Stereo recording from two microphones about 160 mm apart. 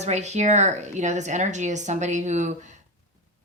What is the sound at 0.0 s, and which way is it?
A woman's voice, 45° right (ahead or behind).